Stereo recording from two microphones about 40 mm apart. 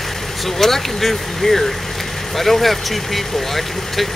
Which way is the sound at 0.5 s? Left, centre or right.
Centre.